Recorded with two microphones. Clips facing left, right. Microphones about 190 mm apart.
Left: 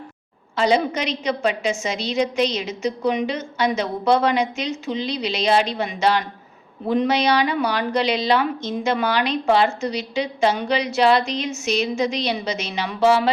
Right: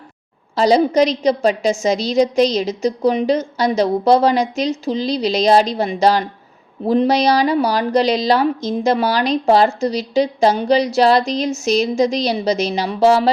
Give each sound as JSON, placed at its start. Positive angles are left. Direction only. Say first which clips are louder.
{"t": 0.5, "sound": "speech", "louder": "right 6 dB", "side_deg": -35}